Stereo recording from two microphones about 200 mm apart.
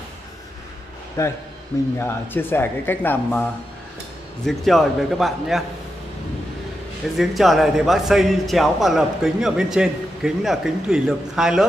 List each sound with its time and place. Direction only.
1.2 s speech: 15° left (ahead or behind)
4.5 s a man's voice: centre (ahead or behind)
7.2 s a man's voice: centre (ahead or behind)